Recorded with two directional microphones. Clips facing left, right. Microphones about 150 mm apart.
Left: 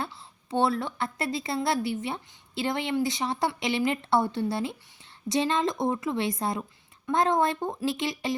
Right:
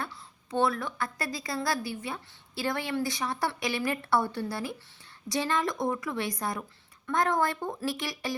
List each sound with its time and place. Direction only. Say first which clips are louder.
0.0 s a woman's voice: left 3 dB; 30° left (ahead or behind)